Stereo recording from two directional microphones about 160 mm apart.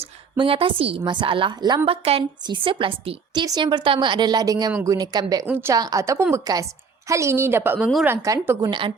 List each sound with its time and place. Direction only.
0.0 s a woman's voice: 35° right (ahead or behind)